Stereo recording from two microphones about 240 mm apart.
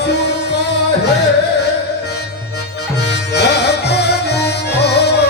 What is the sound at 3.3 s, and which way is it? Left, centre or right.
Music, left.